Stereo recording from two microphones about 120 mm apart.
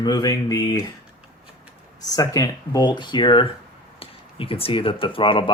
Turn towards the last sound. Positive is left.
turn(degrees=45)  # may be behind; listen again after turning